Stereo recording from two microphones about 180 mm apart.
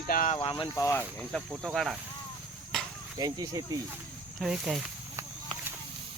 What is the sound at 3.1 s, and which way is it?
Speech, 20° right (ahead or behind).